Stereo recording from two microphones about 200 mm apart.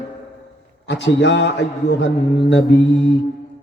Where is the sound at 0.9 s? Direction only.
60° left (ahead or behind).